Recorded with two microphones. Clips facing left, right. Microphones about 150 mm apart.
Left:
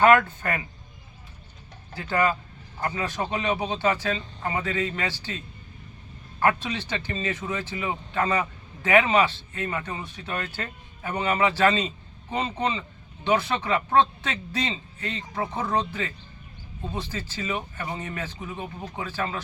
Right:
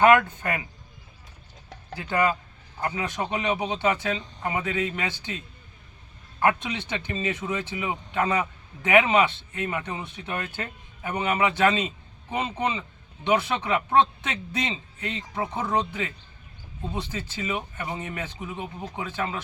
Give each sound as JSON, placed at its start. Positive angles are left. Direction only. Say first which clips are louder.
{"t": 0.0, "sound": "speech", "louder": "even", "side_deg": -15}
{"t": 2.0, "sound": "speech", "louder": "even", "side_deg": -15}
{"t": 6.4, "sound": "speech", "louder": "even", "side_deg": -15}